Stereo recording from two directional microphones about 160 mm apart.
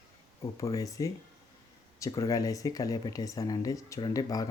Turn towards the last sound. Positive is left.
turn(degrees=20)  # may be behind; listen again after turning